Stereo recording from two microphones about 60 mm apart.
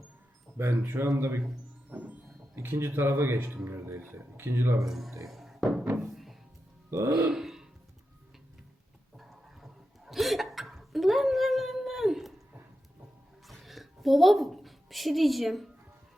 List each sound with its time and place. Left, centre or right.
0.5 s speech: right
1.9 s music: right
2.6 s speech: right
4.8 s speech: centre
5.2 s music: centre
6.9 s speech: right
7.3 s a sound: centre
9.1 s a sound: centre
13.5 s a sound: centre